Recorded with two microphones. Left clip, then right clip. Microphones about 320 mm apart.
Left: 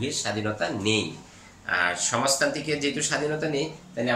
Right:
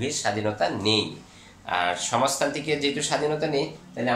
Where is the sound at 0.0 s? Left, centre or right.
Centre.